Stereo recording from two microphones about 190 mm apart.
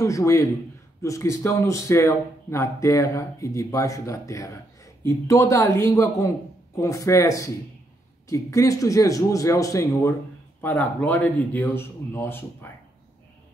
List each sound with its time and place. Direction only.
0.0 s a man's voice: 15° left (ahead or behind)